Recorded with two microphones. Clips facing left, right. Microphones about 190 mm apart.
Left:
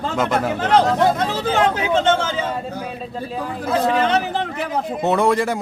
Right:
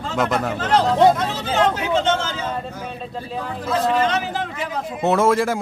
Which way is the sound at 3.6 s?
60° left (ahead or behind).